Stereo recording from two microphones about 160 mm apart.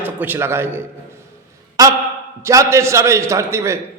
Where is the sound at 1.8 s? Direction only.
20° right (ahead or behind).